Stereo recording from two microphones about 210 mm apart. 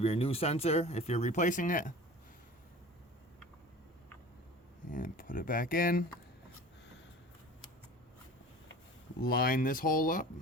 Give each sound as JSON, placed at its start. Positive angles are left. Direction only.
{"t": 0.0, "sound": "speech", "side_deg": 30}
{"t": 4.9, "sound": "speech", "side_deg": 40}
{"t": 9.2, "sound": "speech", "side_deg": 45}